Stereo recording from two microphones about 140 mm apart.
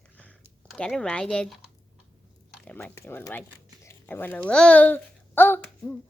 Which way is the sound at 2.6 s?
10° left (ahead or behind).